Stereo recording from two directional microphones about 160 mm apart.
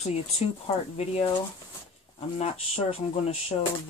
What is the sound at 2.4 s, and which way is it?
Speech, 40° left (ahead or behind).